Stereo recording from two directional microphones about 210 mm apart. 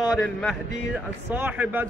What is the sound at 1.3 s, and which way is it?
Speech, 5° right (ahead or behind).